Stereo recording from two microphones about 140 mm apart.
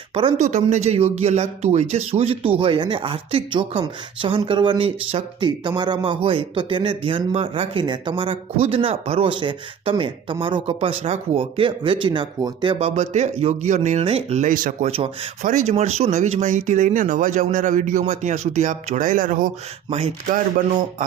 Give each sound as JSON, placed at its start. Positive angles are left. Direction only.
{"t": 0.1, "sound": "speech", "side_deg": -40}
{"t": 0.3, "sound": "speech", "side_deg": -60}
{"t": 12.8, "sound": "speech", "side_deg": -55}
{"t": 14.8, "sound": "speech", "side_deg": -45}
{"t": 15.4, "sound": "speech", "side_deg": -60}